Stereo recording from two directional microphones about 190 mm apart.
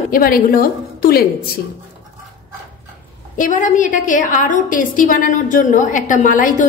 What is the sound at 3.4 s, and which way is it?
A woman's voice, 45° left (ahead or behind).